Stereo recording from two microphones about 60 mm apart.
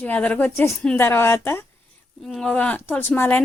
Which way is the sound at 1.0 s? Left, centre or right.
Left.